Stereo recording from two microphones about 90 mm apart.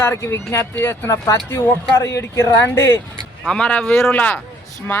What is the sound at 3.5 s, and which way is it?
Speech, 15° left (ahead or behind).